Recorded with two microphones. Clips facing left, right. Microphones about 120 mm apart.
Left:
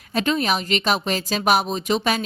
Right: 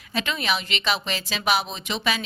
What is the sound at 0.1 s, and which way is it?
A woman's voice, 40° left (ahead or behind).